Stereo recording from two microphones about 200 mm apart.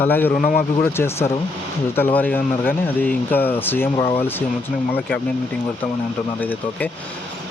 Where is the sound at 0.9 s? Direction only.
10° left (ahead or behind).